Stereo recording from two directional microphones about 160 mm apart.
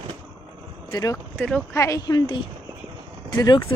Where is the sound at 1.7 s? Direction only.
20° left (ahead or behind).